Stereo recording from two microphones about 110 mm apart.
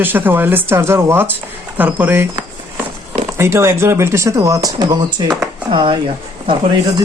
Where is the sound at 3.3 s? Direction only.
25° right (ahead or behind); by 6.0 s 45° right (ahead or behind).